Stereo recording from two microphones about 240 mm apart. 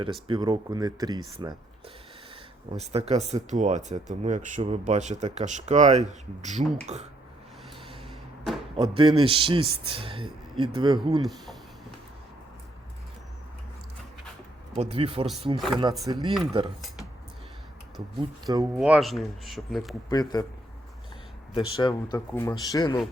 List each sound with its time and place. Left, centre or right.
0.0 s speech: right
8.7 s speech: right
14.8 s speech: right
18.2 s speech: centre
18.8 s speech: centre
20.1 s speech: centre
21.5 s speech: centre